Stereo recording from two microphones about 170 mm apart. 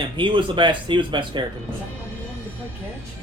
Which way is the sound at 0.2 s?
30° right (ahead or behind).